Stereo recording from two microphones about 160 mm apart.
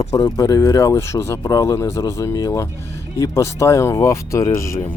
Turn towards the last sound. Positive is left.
turn(degrees=20)  # may be behind; listen again after turning